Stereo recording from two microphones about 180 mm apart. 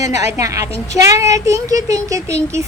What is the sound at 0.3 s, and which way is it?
A woman's voice, 15° right (ahead or behind).